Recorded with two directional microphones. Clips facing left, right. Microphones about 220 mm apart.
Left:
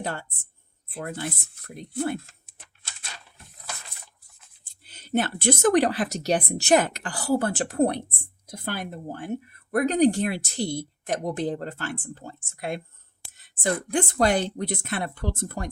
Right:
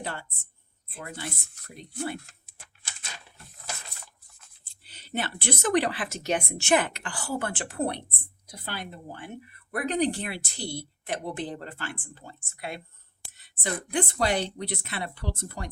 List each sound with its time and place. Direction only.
0.0 s speech: 45° left (ahead or behind)
4.6 s speech: 45° left (ahead or behind)
13.3 s a sound: 45° left (ahead or behind)
13.9 s speech: 45° left (ahead or behind)